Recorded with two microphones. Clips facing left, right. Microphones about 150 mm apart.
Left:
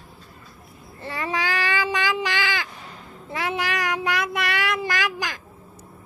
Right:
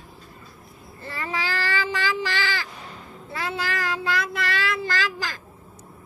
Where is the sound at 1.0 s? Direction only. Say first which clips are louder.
Left 3 dB; 20° left (ahead or behind).